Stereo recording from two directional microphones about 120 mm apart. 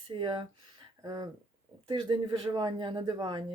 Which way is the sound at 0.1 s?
40° right (ahead or behind).